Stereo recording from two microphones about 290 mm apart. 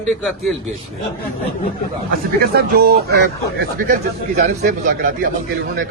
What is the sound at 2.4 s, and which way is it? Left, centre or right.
Speech, right.